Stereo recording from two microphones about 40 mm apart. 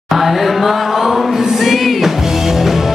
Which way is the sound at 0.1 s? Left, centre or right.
Centre.